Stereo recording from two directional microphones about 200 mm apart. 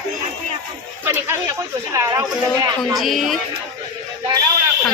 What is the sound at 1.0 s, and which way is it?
Speech, 10° right (ahead or behind).